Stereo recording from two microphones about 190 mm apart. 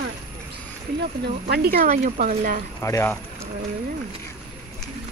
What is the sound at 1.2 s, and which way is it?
Speech, 55° right (ahead or behind).